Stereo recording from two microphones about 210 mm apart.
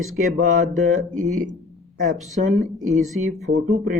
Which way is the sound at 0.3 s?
35° right (ahead or behind).